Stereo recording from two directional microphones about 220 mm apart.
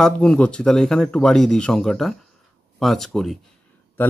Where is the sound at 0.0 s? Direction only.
5° left (ahead or behind).